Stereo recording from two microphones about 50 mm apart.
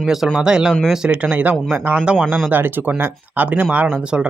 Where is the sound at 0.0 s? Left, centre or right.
Centre; by 2.9 s right.